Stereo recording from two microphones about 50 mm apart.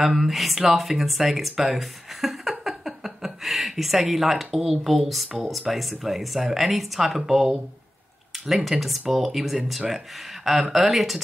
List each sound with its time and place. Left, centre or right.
0.0 s speech: centre